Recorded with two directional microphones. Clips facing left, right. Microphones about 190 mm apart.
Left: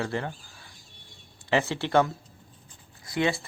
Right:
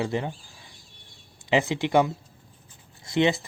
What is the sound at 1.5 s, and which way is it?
Speech, 15° right (ahead or behind).